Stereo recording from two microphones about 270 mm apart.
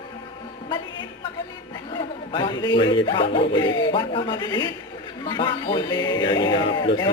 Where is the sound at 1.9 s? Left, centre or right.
Centre.